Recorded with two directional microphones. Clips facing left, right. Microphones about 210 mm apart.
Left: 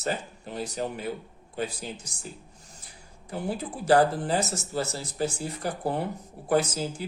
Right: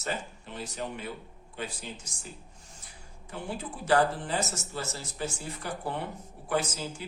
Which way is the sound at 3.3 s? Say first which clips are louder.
Left 5 dB; 40° left (ahead or behind).